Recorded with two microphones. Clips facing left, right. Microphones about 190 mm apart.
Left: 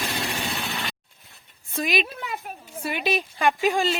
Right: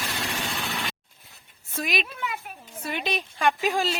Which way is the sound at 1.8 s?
Centre (ahead or behind).